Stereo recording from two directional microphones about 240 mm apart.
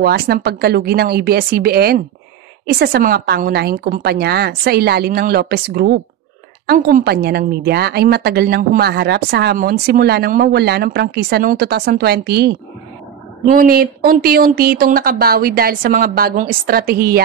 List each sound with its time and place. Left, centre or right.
0.0 s a woman's voice: right
13.5 s a woman's voice: right